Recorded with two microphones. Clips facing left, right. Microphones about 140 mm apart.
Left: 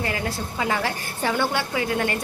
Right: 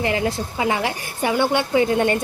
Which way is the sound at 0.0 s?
20° right (ahead or behind).